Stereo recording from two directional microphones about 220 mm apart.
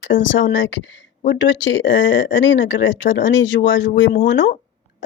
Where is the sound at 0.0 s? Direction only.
60° left (ahead or behind).